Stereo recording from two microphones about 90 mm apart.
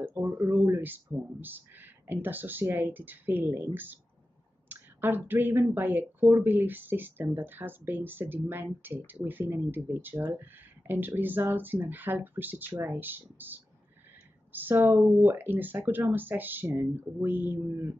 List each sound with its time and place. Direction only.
0.0 s speech: 25° right (ahead or behind)